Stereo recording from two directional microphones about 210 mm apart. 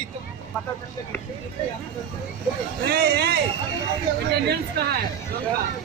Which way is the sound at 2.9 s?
50° right (ahead or behind).